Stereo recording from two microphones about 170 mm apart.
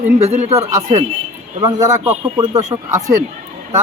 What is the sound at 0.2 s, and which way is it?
Speech, 35° right (ahead or behind).